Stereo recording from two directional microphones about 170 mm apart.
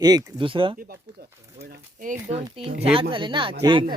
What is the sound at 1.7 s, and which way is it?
Speech, 50° right (ahead or behind).